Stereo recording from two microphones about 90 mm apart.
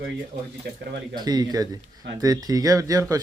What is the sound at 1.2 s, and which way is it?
Speech, 50° right (ahead or behind).